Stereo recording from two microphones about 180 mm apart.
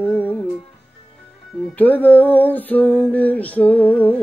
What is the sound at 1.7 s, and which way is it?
Music, 10° left (ahead or behind).